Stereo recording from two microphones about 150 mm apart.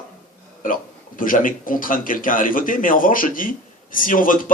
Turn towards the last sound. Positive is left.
turn(degrees=65)  # may be behind; listen again after turning